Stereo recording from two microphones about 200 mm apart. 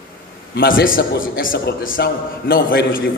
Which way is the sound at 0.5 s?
45° left (ahead or behind).